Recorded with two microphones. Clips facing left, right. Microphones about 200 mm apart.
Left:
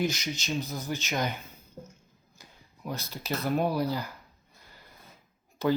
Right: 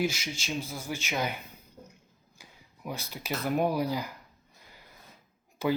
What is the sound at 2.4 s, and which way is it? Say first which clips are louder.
Speech: left 1 dB; 10° right (ahead or behind).